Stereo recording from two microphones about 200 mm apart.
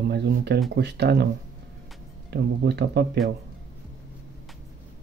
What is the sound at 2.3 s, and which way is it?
Speech, 55° right (ahead or behind).